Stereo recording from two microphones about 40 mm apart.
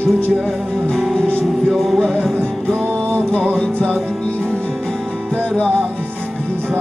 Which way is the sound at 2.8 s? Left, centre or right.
Right.